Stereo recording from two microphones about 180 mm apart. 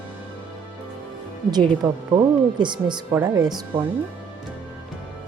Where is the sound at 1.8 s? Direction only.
20° right (ahead or behind).